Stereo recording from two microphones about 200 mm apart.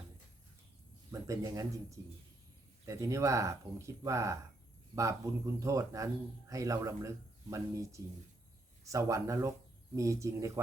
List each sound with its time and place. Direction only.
1.1 s speech: 15° right (ahead or behind)